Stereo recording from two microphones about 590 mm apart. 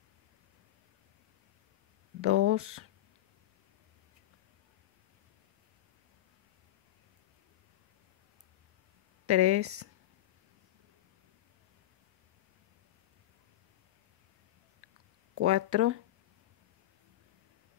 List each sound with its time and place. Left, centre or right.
2.2 s speech: right
9.2 s speech: right
15.3 s speech: right